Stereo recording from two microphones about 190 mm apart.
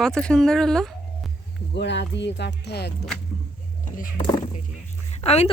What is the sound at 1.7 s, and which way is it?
Speech, 65° left (ahead or behind).